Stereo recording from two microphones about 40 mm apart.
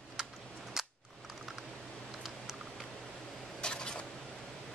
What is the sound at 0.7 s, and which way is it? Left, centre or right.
Camera, centre.